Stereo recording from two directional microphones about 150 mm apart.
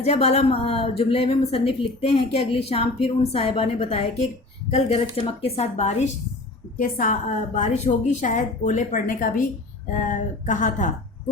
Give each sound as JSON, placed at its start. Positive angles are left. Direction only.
{"t": 0.0, "sound": "a woman's voice", "side_deg": 45}
{"t": 6.7, "sound": "a woman's voice", "side_deg": 60}